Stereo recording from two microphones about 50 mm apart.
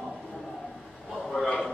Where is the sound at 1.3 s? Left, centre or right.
Centre.